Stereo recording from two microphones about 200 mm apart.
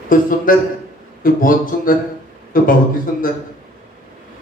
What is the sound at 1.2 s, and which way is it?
Speech, 45° left (ahead or behind).